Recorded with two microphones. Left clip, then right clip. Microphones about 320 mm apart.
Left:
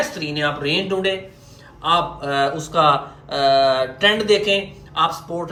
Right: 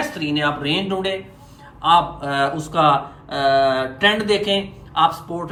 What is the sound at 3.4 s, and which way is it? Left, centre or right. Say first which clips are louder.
Mantra: left 1 dB; centre.